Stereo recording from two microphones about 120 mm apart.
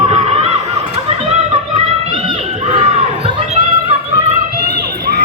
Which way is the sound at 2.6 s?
60° right (ahead or behind).